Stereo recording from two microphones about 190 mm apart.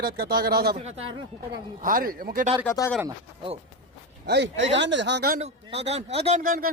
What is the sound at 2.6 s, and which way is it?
Speech, 15° left (ahead or behind).